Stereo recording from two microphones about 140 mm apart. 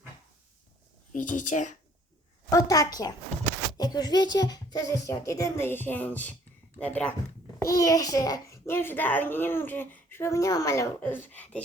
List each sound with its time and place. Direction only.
1.1 s speech: 65° left (ahead or behind)
2.5 s a child's voice: 25° left (ahead or behind); by 7.1 s 10° left (ahead or behind)
7.6 s a child's voice: 25° left (ahead or behind)